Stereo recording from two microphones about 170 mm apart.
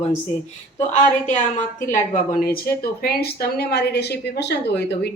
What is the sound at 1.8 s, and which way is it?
Speech, 50° left (ahead or behind).